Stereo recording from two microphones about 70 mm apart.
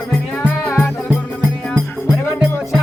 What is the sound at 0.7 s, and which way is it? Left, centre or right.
Music, left.